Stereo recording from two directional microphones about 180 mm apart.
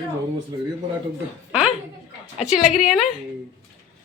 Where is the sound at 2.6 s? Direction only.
40° left (ahead or behind).